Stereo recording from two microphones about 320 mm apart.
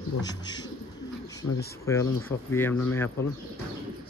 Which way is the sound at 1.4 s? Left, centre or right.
Left.